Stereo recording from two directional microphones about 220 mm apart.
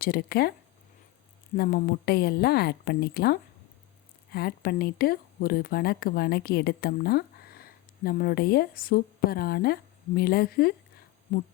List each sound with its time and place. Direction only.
0.0 s a woman's voice: 45° left (ahead or behind)
1.5 s a woman's voice: 45° left (ahead or behind)